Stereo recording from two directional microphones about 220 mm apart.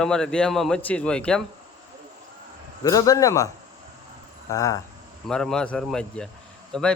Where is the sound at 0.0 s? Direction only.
5° left (ahead or behind).